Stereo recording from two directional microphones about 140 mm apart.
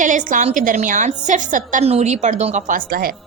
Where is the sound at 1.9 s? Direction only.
50° right (ahead or behind); by 3.1 s 90° right.